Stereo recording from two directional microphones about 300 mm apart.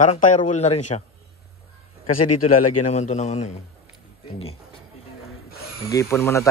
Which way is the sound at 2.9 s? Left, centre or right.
Left.